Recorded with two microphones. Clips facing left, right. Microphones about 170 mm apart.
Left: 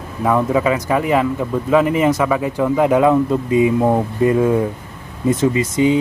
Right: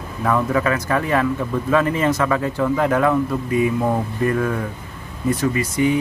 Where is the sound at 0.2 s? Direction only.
15° left (ahead or behind).